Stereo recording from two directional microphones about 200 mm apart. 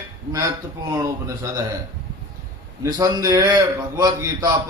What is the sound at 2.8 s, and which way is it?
A man's voice, 15° right (ahead or behind).